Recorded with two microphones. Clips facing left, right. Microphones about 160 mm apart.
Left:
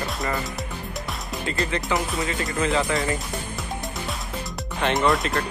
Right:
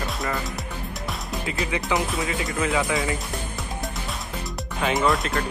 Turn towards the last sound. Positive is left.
turn(degrees=0)  # may be behind; listen again after turning